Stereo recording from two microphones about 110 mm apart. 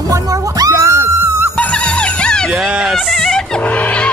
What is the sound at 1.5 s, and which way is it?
Music, 10° left (ahead or behind).